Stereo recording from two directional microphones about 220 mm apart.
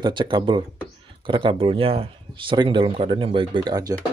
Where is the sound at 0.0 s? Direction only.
20° right (ahead or behind).